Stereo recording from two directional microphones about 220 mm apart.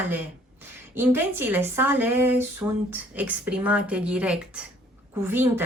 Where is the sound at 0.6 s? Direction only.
10° right (ahead or behind).